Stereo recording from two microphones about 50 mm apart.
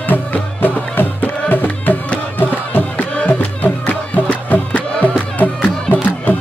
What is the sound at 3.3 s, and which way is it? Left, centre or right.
Music, left.